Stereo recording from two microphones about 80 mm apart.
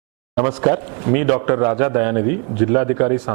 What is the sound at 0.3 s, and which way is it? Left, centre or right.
Speech, centre.